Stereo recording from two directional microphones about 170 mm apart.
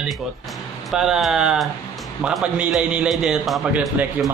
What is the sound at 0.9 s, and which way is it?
A man's voice, 5° right (ahead or behind).